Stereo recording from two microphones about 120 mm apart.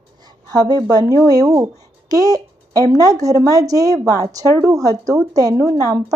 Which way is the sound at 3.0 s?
30° right (ahead or behind).